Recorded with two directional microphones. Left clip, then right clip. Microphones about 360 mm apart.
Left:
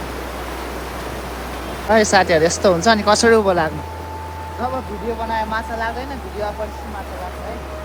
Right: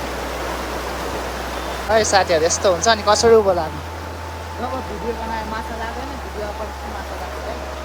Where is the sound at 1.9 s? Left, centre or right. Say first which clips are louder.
Left 2 dB; left.